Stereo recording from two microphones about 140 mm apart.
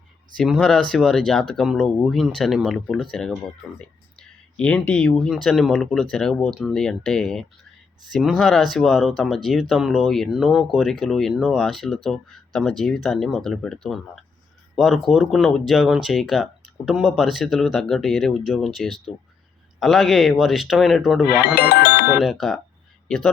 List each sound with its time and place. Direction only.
0.3 s speech: centre (ahead or behind)
4.5 s speech: 10° left (ahead or behind)
14.8 s speech: centre (ahead or behind)
21.2 s speech: 90° left
22.2 s speech: centre (ahead or behind)